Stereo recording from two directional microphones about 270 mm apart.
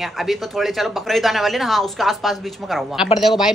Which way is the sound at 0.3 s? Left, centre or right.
Centre.